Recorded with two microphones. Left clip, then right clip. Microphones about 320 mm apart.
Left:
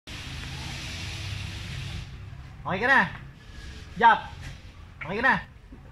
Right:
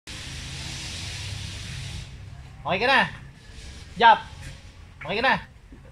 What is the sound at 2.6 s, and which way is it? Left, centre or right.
Speech, right.